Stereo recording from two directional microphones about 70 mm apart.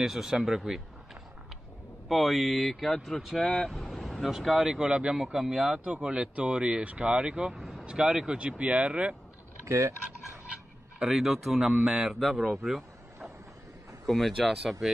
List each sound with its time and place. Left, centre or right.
0.0 s speech: centre
2.0 s speech: centre
3.3 s speech: centre
3.7 s vehicle: centre
4.3 s speech: centre
9.7 s a sound: right
11.0 s speech: centre